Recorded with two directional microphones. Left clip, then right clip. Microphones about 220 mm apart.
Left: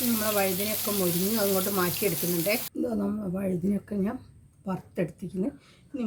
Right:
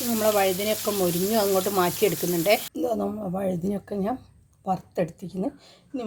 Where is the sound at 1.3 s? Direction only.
40° right (ahead or behind).